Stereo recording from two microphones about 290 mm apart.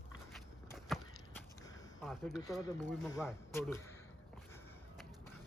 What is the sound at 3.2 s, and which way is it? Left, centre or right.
Speech, centre.